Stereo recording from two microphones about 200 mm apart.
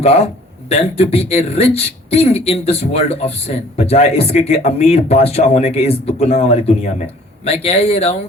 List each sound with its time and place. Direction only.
0.0 s a man's voice: 30° left (ahead or behind)